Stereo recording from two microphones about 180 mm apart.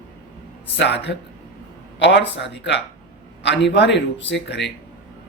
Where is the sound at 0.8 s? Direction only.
70° left (ahead or behind).